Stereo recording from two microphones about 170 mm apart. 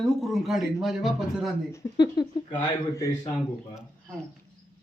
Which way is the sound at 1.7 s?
25° left (ahead or behind).